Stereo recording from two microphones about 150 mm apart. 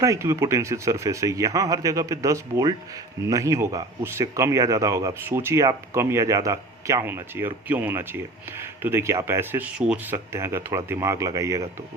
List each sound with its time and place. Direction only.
0.0 s speech: 20° right (ahead or behind)